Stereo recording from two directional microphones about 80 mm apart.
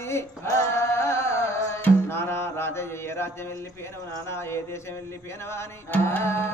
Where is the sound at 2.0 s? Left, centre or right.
Left.